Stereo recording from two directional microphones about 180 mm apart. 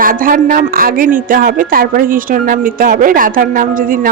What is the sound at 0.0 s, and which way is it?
A woman's voice, 50° right (ahead or behind).